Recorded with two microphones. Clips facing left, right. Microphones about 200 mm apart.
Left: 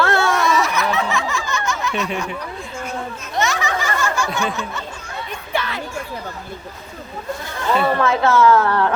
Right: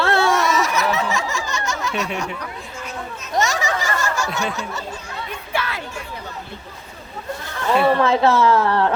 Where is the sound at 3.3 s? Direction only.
40° right (ahead or behind).